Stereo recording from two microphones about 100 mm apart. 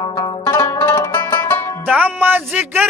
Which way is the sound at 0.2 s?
35° left (ahead or behind).